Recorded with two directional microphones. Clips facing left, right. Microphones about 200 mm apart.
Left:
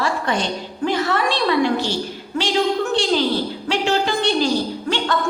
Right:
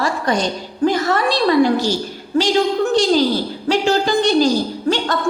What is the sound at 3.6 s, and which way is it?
Speech, 40° right (ahead or behind).